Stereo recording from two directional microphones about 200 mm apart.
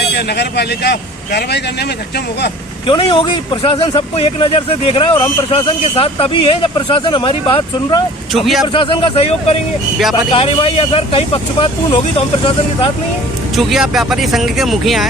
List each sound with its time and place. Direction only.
0.0 s a man's voice: 55° left (ahead or behind)
2.8 s speech: 25° left (ahead or behind)
8.3 s speech: centre (ahead or behind)
8.6 s speech: 25° left (ahead or behind)
13.6 s speech: centre (ahead or behind)